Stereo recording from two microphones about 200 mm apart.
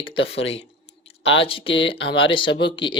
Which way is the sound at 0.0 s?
25° left (ahead or behind).